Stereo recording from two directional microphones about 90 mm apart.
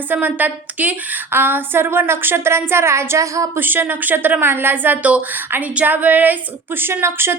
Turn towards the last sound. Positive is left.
turn(degrees=-25)  # may be behind; listen again after turning